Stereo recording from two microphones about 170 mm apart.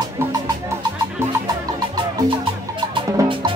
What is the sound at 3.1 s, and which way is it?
Music, 30° right (ahead or behind).